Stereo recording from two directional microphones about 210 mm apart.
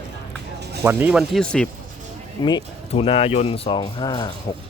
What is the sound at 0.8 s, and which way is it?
Speech, 10° right (ahead or behind).